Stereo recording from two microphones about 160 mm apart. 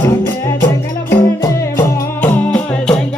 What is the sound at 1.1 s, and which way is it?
Music, 15° left (ahead or behind).